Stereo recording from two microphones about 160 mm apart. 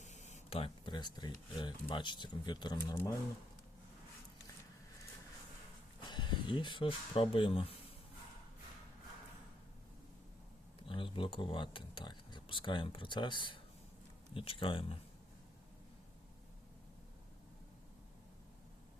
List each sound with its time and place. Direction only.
0.0 s speech: 45° left (ahead or behind); by 2.7 s 25° left (ahead or behind)
6.0 s speech: 30° left (ahead or behind)
10.8 s speech: 35° left (ahead or behind)